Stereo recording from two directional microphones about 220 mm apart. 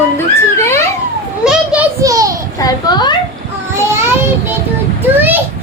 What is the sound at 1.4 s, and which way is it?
Speech, 5° right (ahead or behind).